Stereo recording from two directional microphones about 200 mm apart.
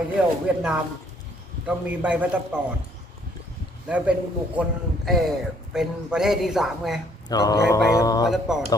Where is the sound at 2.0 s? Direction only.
10° right (ahead or behind).